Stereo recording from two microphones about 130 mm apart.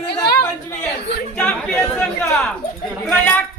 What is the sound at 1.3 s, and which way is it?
Chatter, 10° left (ahead or behind).